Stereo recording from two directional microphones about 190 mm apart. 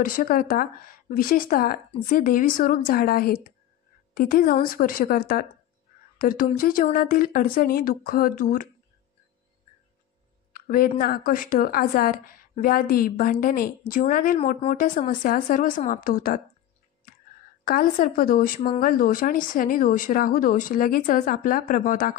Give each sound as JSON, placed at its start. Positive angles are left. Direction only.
{"t": 0.0, "sound": "a woman's voice", "side_deg": 45}
{"t": 10.5, "sound": "music", "side_deg": 50}
{"t": 11.0, "sound": "a woman's voice", "side_deg": 50}
{"t": 17.6, "sound": "a woman's voice", "side_deg": 50}